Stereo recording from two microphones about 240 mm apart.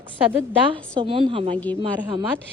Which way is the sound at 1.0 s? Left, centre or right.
Right.